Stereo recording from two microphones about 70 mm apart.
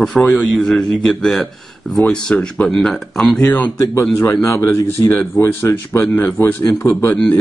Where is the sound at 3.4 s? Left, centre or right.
Left.